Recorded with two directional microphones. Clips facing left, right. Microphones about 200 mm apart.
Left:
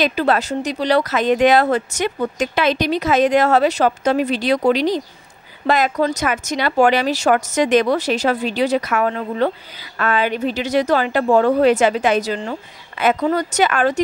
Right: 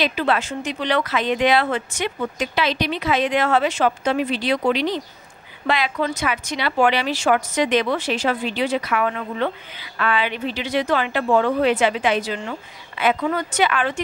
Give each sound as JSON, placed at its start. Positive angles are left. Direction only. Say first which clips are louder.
{"t": 0.0, "sound": "speech", "louder": "left 4 dB", "side_deg": 40}